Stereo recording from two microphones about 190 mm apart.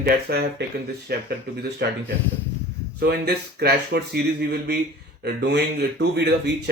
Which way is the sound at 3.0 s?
60° right (ahead or behind).